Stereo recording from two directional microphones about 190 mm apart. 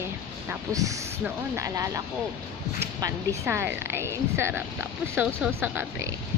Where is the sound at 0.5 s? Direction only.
15° right (ahead or behind).